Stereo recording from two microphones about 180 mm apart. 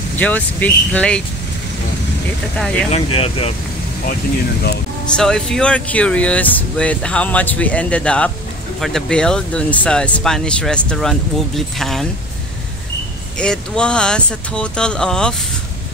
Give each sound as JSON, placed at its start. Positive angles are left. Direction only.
{"t": 0.2, "sound": "speech", "side_deg": 10}
{"t": 2.9, "sound": "speech", "side_deg": 30}
{"t": 5.1, "sound": "speech", "side_deg": 5}
{"t": 13.4, "sound": "speech", "side_deg": 5}